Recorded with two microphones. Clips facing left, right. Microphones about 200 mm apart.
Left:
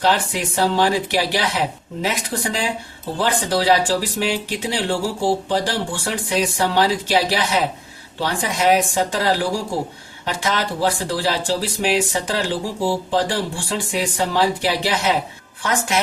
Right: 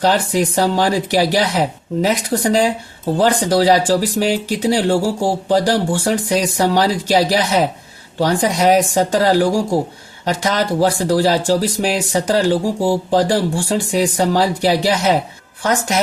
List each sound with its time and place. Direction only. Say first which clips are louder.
0.0 s speech: right 5 dB; 40° right (ahead or behind)